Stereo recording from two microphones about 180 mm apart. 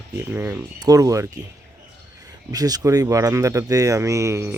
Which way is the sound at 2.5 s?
20° right (ahead or behind).